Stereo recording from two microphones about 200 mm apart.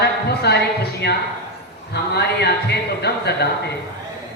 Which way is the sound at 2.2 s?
55° left (ahead or behind).